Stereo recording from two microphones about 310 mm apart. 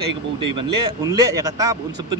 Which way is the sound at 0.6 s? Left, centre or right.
Centre.